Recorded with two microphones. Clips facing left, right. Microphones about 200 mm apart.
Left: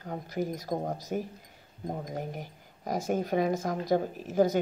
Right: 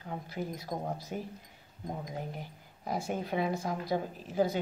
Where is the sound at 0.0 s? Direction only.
45° left (ahead or behind).